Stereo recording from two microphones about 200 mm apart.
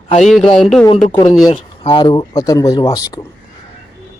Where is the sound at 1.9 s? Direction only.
20° left (ahead or behind).